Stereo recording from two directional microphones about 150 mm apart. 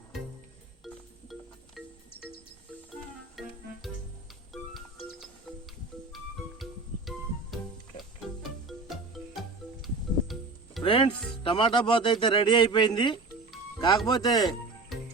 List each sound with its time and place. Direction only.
3.4 s music: centre (ahead or behind)
4.5 s music: centre (ahead or behind)
6.6 s music: centre (ahead or behind)
8.7 s music: 5° left (ahead or behind)
10.8 s speech: 35° left (ahead or behind)